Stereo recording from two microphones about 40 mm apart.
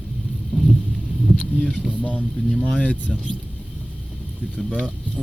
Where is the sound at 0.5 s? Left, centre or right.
Left.